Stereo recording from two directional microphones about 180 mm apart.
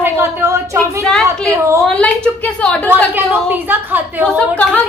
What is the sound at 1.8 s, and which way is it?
A woman's voice, 5° left (ahead or behind).